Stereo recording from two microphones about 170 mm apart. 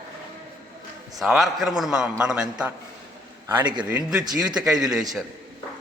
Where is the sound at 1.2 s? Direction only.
Centre (ahead or behind).